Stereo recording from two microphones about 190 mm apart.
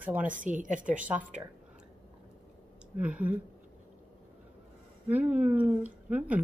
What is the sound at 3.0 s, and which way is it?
Speech, 5° right (ahead or behind).